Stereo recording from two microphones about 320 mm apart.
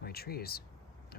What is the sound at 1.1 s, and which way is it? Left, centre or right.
Vehicle, left.